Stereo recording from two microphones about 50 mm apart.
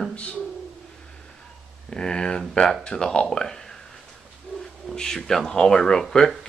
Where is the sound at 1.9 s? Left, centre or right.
Centre.